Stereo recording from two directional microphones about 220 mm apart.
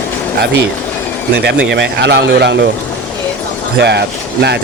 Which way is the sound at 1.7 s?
50° right (ahead or behind).